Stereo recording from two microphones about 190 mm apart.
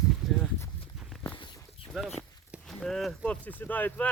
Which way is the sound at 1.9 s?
Centre (ahead or behind).